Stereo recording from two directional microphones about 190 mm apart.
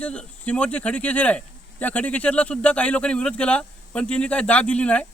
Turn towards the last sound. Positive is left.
turn(degrees=5)  # may be behind; listen again after turning